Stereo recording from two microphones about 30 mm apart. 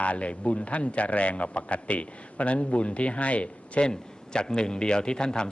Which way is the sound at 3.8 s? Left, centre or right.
Left.